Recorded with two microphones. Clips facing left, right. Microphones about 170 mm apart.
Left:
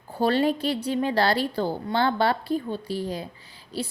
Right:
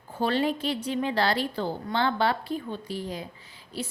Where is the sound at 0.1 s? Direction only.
40° left (ahead or behind).